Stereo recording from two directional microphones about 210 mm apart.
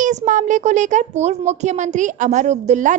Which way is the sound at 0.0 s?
35° right (ahead or behind).